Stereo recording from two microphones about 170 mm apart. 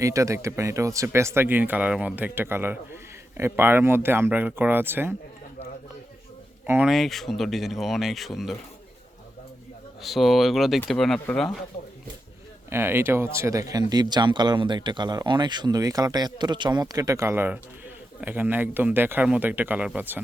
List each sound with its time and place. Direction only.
0.0 s speech: 20° right (ahead or behind)
6.7 s speech: 5° right (ahead or behind)
10.0 s speech: centre (ahead or behind)
12.7 s speech: 15° right (ahead or behind)